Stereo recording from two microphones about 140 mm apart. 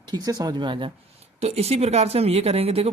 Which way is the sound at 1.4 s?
50° right (ahead or behind).